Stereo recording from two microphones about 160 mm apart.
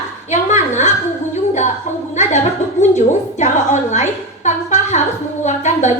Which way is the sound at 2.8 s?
45° left (ahead or behind).